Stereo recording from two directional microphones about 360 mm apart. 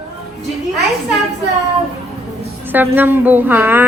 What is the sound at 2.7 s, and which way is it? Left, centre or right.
A woman's voice, centre.